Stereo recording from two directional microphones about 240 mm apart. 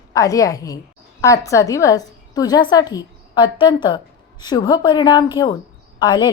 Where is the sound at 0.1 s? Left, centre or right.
Centre.